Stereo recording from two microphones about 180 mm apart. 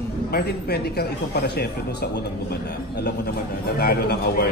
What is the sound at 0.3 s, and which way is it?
Speech, 60° left (ahead or behind).